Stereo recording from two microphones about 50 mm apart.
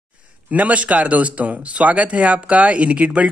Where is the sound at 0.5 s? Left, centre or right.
Right.